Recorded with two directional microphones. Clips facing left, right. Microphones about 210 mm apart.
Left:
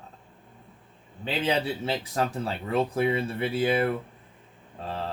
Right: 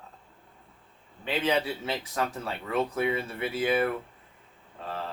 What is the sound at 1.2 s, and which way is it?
Speech, 30° left (ahead or behind).